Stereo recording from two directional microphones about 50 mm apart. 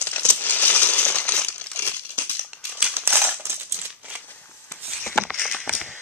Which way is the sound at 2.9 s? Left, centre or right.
Right.